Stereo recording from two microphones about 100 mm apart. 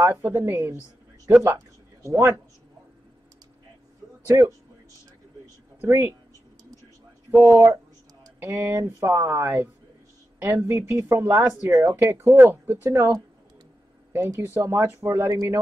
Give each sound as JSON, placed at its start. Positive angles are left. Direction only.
{"t": 0.0, "sound": "speech", "side_deg": -20}
{"t": 5.8, "sound": "speech", "side_deg": -25}
{"t": 7.2, "sound": "speech", "side_deg": -20}
{"t": 14.1, "sound": "speech", "side_deg": -35}
{"t": 14.4, "sound": "speech", "side_deg": -25}